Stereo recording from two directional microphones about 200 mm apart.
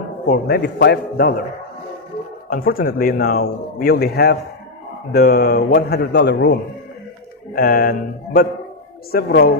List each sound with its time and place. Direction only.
0.3 s speech: 50° left (ahead or behind)
2.5 s speech: 45° left (ahead or behind)
7.5 s speech: 45° left (ahead or behind)